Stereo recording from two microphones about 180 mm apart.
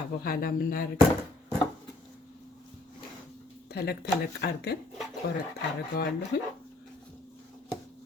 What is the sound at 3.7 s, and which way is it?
A woman's voice, 60° left (ahead or behind).